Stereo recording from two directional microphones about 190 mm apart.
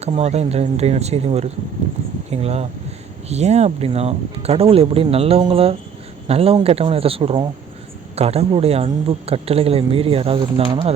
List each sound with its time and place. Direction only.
0.0 s speech: 35° right (ahead or behind)